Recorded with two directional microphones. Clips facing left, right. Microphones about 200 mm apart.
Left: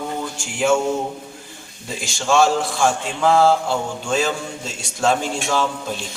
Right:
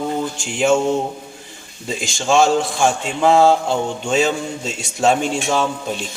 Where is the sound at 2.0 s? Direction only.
25° right (ahead or behind).